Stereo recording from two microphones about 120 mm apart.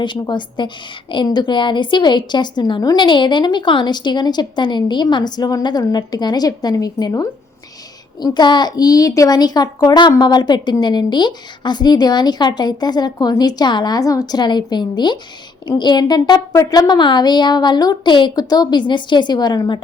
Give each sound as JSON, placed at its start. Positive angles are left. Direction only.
{"t": 0.0, "sound": "a child's voice", "side_deg": 40}